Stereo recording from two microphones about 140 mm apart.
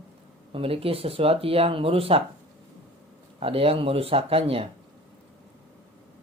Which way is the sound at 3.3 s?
40° right (ahead or behind).